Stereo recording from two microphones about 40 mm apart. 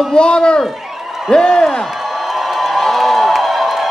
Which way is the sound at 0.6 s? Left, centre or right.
Centre.